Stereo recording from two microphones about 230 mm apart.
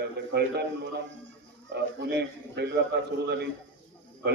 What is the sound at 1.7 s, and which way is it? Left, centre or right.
A man's voice, right.